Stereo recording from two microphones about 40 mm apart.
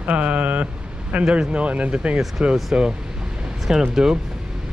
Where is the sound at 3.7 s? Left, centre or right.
Centre.